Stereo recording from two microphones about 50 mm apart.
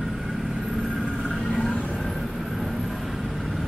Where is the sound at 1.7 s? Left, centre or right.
Left.